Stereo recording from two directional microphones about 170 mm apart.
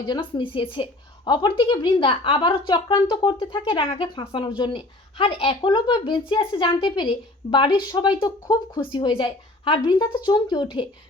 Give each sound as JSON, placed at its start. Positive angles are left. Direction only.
{"t": 0.1, "sound": "a woman's voice", "side_deg": 30}